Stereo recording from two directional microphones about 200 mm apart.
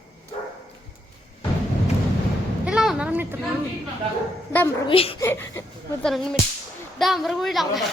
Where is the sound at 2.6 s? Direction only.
5° right (ahead or behind).